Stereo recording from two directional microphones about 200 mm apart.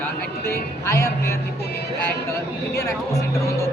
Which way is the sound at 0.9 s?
15° left (ahead or behind).